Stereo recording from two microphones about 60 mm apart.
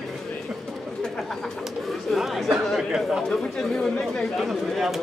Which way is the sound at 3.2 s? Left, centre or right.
Centre.